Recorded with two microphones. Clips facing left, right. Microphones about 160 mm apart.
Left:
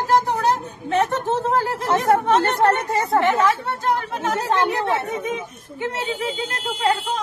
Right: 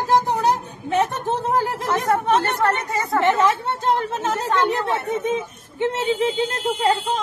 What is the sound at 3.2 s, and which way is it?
Speech, 20° right (ahead or behind).